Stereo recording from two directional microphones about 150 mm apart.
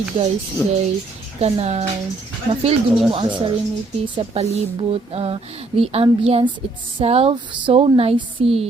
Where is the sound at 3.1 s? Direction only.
35° right (ahead or behind).